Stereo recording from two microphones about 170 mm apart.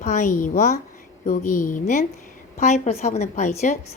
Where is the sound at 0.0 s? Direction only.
45° left (ahead or behind).